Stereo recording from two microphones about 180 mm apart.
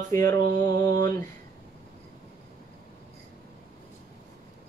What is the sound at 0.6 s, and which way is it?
Speech, 20° left (ahead or behind).